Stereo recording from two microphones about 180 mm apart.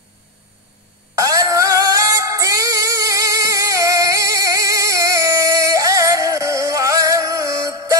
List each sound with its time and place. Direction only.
1.1 s synthetic singing: 20° right (ahead or behind)